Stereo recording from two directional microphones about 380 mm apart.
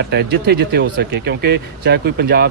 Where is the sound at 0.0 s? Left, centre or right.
Right.